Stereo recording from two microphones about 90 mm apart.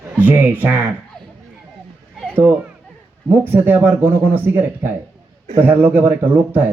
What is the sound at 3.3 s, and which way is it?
Speech, 20° right (ahead or behind).